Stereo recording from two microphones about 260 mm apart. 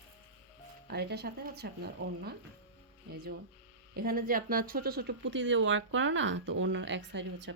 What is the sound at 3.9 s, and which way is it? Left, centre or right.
A woman's voice, right.